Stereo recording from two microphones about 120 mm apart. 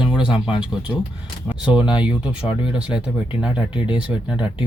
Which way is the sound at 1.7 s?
10° right (ahead or behind).